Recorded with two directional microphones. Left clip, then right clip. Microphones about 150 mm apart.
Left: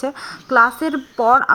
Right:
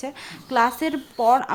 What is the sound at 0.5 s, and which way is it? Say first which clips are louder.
Speech: left 6 dB; 15° right (ahead or behind).